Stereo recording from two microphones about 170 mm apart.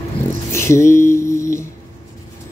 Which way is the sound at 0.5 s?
15° left (ahead or behind).